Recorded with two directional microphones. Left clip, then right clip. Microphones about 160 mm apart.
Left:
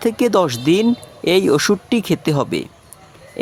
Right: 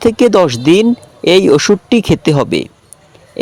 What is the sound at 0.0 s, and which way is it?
A man's voice, 25° right (ahead or behind).